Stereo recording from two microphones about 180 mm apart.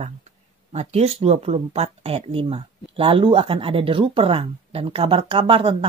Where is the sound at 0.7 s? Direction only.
35° right (ahead or behind).